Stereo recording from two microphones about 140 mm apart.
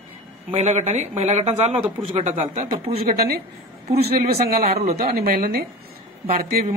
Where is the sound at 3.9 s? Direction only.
90° right.